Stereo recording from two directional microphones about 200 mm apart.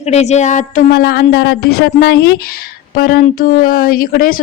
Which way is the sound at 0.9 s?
50° left (ahead or behind).